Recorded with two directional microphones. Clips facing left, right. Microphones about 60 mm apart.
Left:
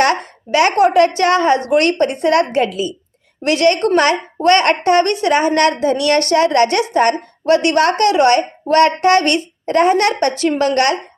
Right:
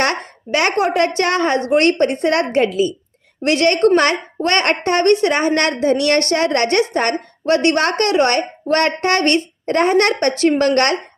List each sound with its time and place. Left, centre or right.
0.5 s a woman's voice: right